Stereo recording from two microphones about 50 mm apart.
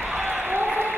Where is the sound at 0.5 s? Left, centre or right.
Right.